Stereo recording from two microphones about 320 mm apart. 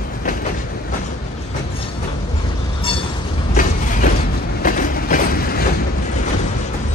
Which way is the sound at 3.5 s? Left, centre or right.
Left.